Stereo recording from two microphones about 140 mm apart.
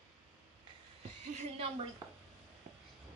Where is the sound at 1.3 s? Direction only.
45° right (ahead or behind).